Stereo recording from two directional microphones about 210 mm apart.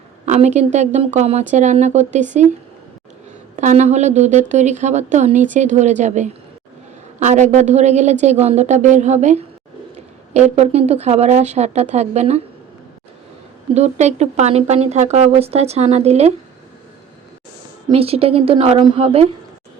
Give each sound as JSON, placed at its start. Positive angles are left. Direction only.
{"t": 0.3, "sound": "a woman's voice", "side_deg": -35}
{"t": 3.5, "sound": "a woman's voice", "side_deg": -35}
{"t": 7.3, "sound": "a woman's voice", "side_deg": -35}
{"t": 13.7, "sound": "a woman's voice", "side_deg": -30}
{"t": 17.8, "sound": "a woman's voice", "side_deg": -30}